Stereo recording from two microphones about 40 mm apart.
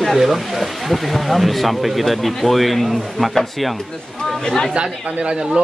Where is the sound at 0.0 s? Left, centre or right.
Centre.